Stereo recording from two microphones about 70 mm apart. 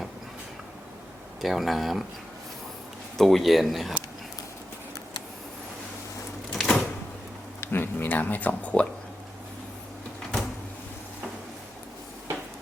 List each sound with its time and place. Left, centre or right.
1.4 s speech: centre
3.2 s speech: centre
6.5 s a sound: centre
7.6 s speech: left